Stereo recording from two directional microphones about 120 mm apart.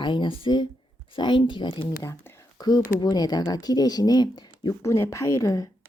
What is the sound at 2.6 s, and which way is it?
Speech, 35° left (ahead or behind).